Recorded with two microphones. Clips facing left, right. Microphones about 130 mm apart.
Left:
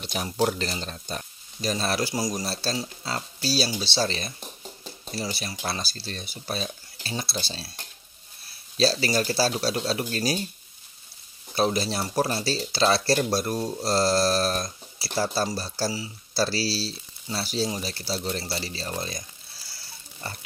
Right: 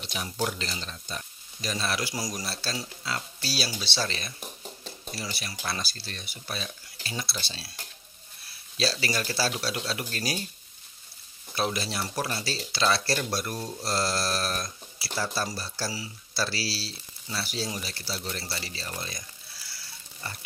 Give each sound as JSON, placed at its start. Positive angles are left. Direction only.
{"t": 0.0, "sound": "speech", "side_deg": 45}
{"t": 11.5, "sound": "speech", "side_deg": 35}